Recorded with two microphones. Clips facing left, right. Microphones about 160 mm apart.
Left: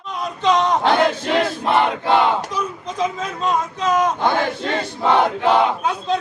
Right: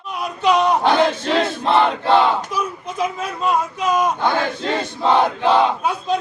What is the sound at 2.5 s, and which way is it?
Speech, 10° right (ahead or behind).